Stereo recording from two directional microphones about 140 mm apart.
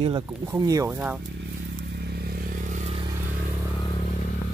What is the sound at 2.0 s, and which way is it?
Motorcycle, 90° right.